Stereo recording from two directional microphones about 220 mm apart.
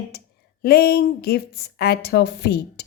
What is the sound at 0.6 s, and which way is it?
A woman's voice, 45° left (ahead or behind).